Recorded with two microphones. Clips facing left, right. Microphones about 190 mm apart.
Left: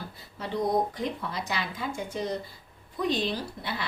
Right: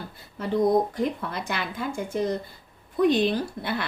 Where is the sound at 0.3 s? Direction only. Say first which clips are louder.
Right 5 dB; 50° right (ahead or behind).